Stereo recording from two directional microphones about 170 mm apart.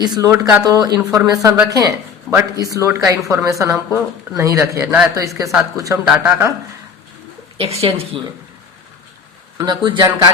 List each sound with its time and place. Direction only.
0.0 s a woman's voice: 20° right (ahead or behind)
7.6 s a woman's voice: 35° right (ahead or behind)
9.6 s a woman's voice: 25° right (ahead or behind)